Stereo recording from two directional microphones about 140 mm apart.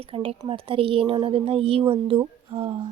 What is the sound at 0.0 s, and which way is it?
Speech, 45° right (ahead or behind).